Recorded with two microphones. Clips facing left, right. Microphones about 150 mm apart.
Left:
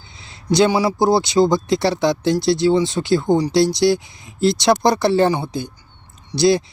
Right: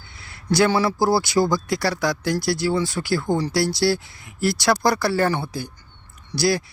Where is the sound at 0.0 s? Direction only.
20° left (ahead or behind).